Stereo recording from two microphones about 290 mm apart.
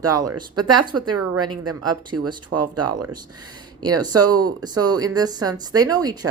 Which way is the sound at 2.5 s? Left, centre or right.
Right.